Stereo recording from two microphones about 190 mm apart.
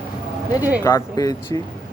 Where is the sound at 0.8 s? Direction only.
15° left (ahead or behind).